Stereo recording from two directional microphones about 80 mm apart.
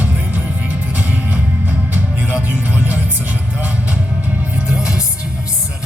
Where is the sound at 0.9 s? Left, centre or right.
Right.